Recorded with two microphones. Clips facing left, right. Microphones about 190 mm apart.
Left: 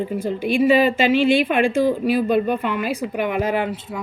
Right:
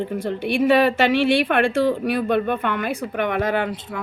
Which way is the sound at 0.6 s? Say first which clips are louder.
Even; 70° right (ahead or behind).